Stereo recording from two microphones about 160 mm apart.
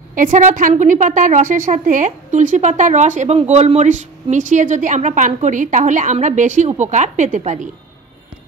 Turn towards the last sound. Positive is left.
turn(degrees=-50)  # may be behind; listen again after turning